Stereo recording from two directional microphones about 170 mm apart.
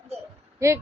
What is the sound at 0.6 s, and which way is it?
Speech, 15° right (ahead or behind).